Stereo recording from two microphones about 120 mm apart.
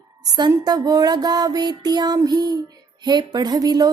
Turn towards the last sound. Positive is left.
turn(degrees=-30)  # may be behind; listen again after turning